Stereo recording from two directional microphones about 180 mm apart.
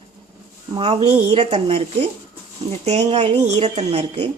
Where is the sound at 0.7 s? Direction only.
25° right (ahead or behind).